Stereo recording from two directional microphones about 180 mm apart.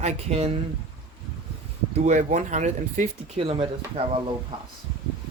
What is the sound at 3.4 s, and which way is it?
Speech, 30° right (ahead or behind).